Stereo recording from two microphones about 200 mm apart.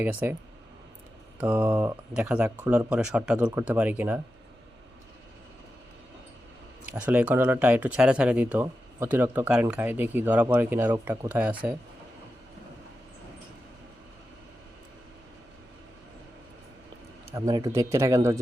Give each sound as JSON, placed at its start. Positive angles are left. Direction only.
{"t": 0.0, "sound": "speech", "side_deg": -10}
{"t": 1.4, "sound": "speech", "side_deg": -10}
{"t": 6.8, "sound": "speech", "side_deg": -5}
{"t": 17.3, "sound": "speech", "side_deg": -15}